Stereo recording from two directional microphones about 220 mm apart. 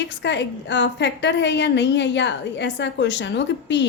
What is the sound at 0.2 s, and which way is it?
A woman's voice, 50° left (ahead or behind).